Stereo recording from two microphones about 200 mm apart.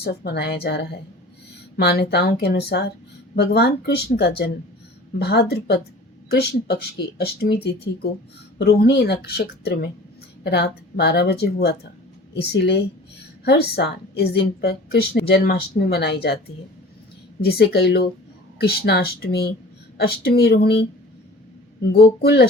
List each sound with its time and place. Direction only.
0.0 s a woman's voice: 55° left (ahead or behind)
17.4 s a woman's voice: 55° left (ahead or behind)
21.9 s a woman's voice: 55° left (ahead or behind)